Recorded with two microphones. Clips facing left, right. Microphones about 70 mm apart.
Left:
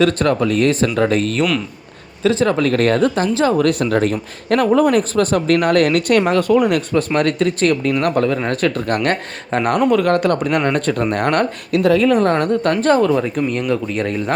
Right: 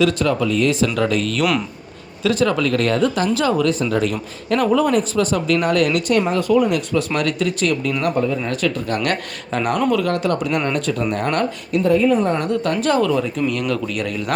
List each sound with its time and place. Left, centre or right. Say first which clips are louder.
0.0 s speech: left 2 dB; left
3.7 s speech: left 3 dB; left
7.1 s speech: left 4 dB; left
8.0 s speech: left 2 dB; left
8.4 s speech: left 3 dB; left
9.0 s speech: left 3 dB; left
11.8 s a woman's voice: left 2 dB; left
12.6 s speech: left 3 dB; left